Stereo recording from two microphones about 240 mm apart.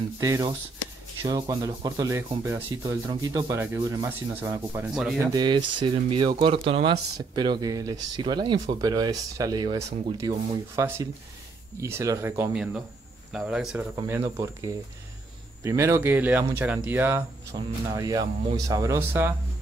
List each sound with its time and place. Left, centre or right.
0.2 s speech: centre
5.3 s a man's voice: centre